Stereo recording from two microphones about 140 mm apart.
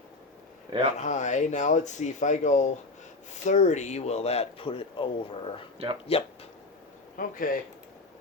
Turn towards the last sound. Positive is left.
turn(degrees=80)